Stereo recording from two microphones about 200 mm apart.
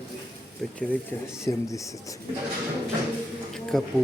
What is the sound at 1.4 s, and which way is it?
Speech, 15° left (ahead or behind).